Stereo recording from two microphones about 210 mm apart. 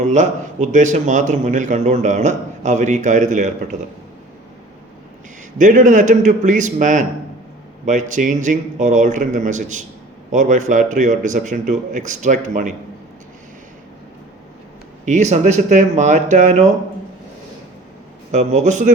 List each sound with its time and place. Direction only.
0.0 s a man's voice: 35° right (ahead or behind)
5.5 s a man's voice: 35° right (ahead or behind)
15.0 s a man's voice: 35° right (ahead or behind)
18.3 s a man's voice: 35° right (ahead or behind)